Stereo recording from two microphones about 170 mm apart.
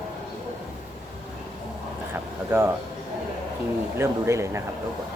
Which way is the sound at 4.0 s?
15° right (ahead or behind).